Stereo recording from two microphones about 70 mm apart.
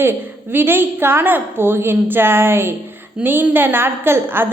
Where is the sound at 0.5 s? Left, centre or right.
Right.